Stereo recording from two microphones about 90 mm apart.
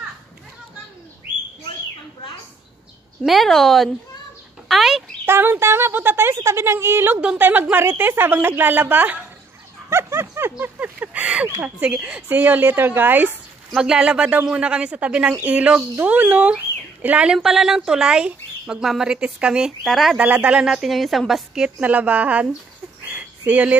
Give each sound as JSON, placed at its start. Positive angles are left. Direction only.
{"t": 3.3, "sound": "a woman's voice", "side_deg": 0}
{"t": 4.6, "sound": "chicken", "side_deg": 0}
{"t": 5.2, "sound": "speech", "side_deg": -25}
{"t": 9.8, "sound": "a sound", "side_deg": -30}
{"t": 10.6, "sound": "speech", "side_deg": -20}
{"t": 12.3, "sound": "speech", "side_deg": -20}
{"t": 13.7, "sound": "speech", "side_deg": -10}
{"t": 17.4, "sound": "speech", "side_deg": -5}
{"t": 20.2, "sound": "speech", "side_deg": -15}
{"t": 20.6, "sound": "speech", "side_deg": 0}
{"t": 23.0, "sound": "a sound", "side_deg": -15}